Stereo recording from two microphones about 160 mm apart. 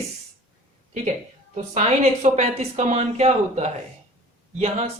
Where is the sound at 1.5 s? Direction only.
45° right (ahead or behind).